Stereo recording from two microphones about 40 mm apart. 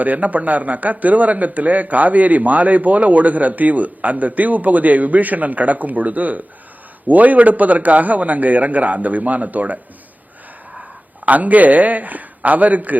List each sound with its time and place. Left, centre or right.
0.0 s a man's voice: right
11.3 s a man's voice: right